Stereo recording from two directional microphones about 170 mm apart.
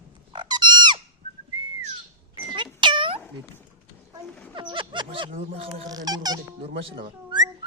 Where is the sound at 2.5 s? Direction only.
30° right (ahead or behind).